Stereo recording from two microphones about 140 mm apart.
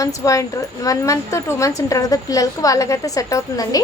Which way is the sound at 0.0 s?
25° left (ahead or behind).